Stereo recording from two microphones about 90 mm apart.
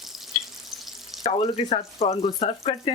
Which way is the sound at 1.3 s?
90° left.